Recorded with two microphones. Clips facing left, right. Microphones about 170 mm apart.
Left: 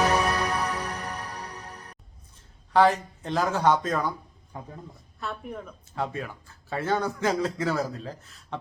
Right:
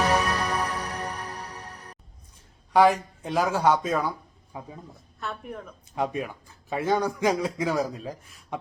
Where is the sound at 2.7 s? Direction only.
10° right (ahead or behind).